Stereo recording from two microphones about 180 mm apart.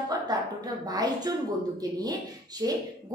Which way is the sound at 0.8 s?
20° right (ahead or behind).